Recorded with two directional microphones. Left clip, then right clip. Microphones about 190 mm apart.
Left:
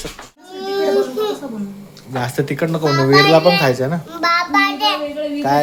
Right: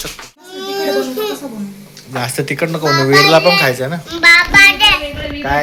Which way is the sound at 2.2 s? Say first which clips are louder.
Right 2 dB; 15° left (ahead or behind).